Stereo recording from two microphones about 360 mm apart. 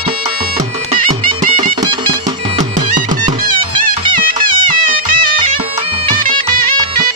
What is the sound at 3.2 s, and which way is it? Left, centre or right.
Music, centre.